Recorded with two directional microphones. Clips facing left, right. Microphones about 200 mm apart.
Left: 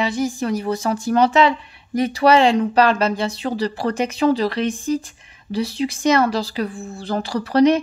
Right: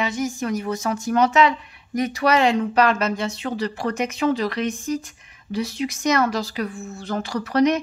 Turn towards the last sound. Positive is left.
turn(degrees=30)  # may be behind; listen again after turning